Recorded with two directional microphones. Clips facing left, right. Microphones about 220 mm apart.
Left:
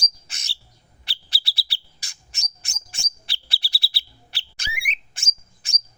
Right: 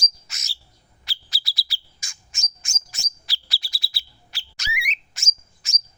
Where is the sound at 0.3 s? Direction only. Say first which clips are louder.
Even; 30° left (ahead or behind).